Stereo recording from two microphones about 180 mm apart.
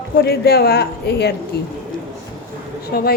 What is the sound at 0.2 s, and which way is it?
A woman's voice, 60° left (ahead or behind).